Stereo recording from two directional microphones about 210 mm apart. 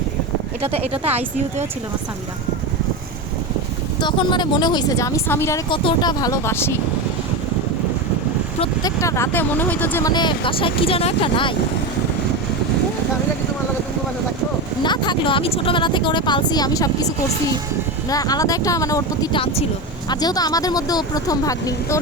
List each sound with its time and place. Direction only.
0.6 s speech: 10° right (ahead or behind)
1.0 s speech: 30° right (ahead or behind)
4.0 s speech: 20° left (ahead or behind)
5.6 s speech: 25° left (ahead or behind)
8.6 s speech: 15° left (ahead or behind)
14.8 s speech: 20° left (ahead or behind)
18.1 s speech: 15° left (ahead or behind)